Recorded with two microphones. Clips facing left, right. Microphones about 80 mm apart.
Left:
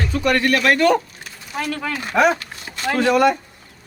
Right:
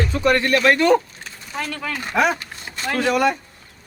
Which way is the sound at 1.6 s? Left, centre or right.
Centre.